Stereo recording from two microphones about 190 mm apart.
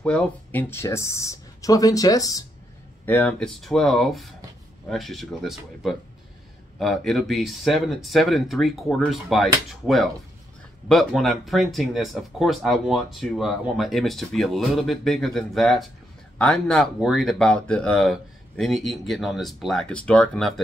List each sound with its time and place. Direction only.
0.0 s speech: 5° left (ahead or behind)
3.1 s speech: 5° left (ahead or behind)